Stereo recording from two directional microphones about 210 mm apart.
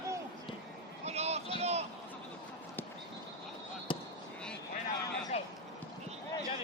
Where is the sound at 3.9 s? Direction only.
25° left (ahead or behind).